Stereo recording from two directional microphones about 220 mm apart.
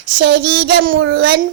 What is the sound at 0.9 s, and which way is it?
Speech, 60° right (ahead or behind).